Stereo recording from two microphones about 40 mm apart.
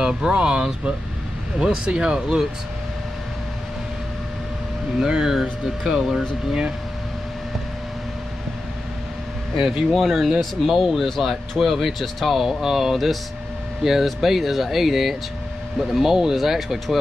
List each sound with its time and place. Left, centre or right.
0.0 s speech: centre
1.9 s speech: right
5.0 s speech: centre
9.9 s speech: centre
10.7 s speech: centre